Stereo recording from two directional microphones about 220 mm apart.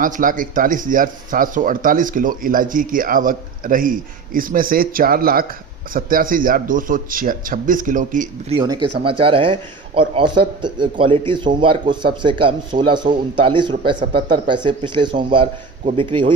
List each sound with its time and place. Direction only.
0.0 s speech: 40° right (ahead or behind)
8.5 s a man's voice: 20° right (ahead or behind)